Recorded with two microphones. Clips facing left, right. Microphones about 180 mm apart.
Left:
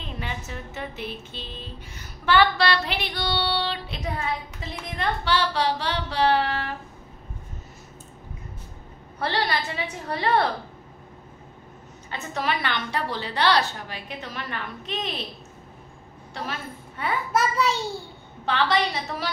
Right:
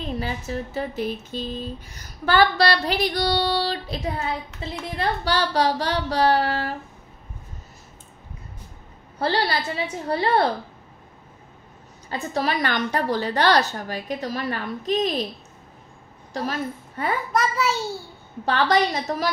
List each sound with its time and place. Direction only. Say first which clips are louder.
0.0 s music: right 6 dB; 35° right (ahead or behind)
9.2 s music: right 3 dB; 30° right (ahead or behind)
12.1 s a woman's voice: right 3 dB; 35° right (ahead or behind)
16.3 s a woman's voice: right 6 dB; 40° right (ahead or behind)
17.3 s a child's voice: left 2 dB; centre (ahead or behind)
18.4 s music: right 3 dB; 40° right (ahead or behind)